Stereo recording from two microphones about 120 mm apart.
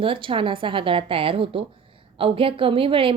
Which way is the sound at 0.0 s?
45° right (ahead or behind).